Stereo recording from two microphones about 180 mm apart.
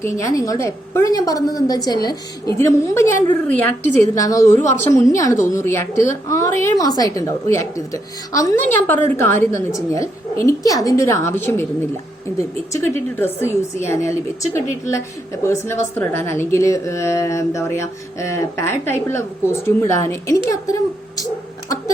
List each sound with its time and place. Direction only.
0.0 s a woman's voice: 15° left (ahead or behind)
12.7 s a woman's voice: 15° left (ahead or behind)